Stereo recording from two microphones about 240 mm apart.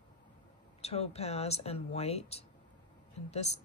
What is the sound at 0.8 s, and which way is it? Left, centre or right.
Speech, left.